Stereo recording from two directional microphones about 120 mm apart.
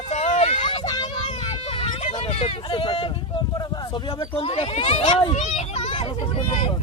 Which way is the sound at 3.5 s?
35° left (ahead or behind).